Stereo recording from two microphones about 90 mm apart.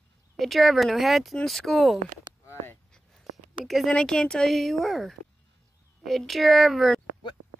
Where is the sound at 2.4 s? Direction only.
30° left (ahead or behind).